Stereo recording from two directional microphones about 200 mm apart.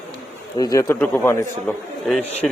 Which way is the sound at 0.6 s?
20° left (ahead or behind).